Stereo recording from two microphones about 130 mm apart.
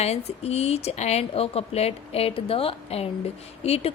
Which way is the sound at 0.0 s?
55° left (ahead or behind).